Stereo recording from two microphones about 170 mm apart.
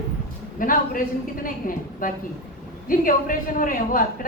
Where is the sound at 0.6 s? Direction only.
55° left (ahead or behind).